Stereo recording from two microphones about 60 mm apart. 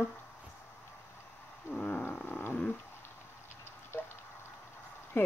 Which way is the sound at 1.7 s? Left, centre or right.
Centre.